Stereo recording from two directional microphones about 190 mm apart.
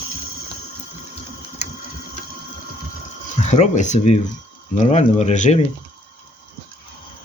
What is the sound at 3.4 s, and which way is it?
Speech, 40° left (ahead or behind).